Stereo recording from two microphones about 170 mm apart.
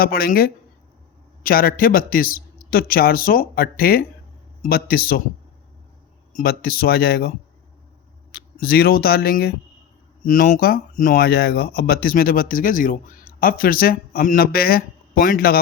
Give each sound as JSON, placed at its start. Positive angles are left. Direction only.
{"t": 0.0, "sound": "speech", "side_deg": 60}
{"t": 6.3, "sound": "speech", "side_deg": 65}